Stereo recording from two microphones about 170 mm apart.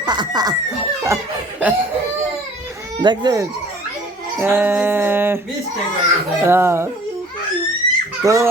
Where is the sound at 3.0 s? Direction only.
25° right (ahead or behind).